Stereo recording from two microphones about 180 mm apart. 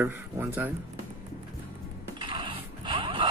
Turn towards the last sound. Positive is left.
turn(degrees=-30)  # may be behind; listen again after turning